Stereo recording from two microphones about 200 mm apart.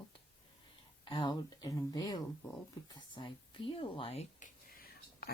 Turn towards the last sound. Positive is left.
turn(degrees=45)  # may be behind; listen again after turning